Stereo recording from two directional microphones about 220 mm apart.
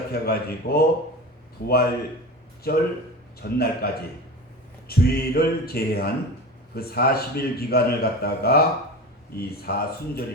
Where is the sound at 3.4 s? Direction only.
45° left (ahead or behind).